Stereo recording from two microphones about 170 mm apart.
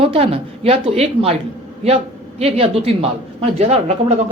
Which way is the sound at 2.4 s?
35° right (ahead or behind).